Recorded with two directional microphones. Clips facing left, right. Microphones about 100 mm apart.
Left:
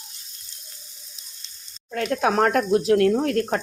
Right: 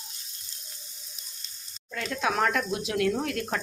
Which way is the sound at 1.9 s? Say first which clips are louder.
Left 7 dB; 50° left (ahead or behind).